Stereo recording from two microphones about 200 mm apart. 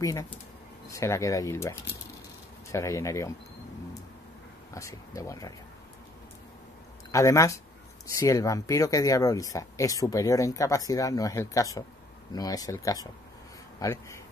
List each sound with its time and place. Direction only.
0.0 s speech: 15° left (ahead or behind)
4.7 s speech: 15° left (ahead or behind)
7.1 s speech: 15° left (ahead or behind)
13.7 s a sound: 15° left (ahead or behind)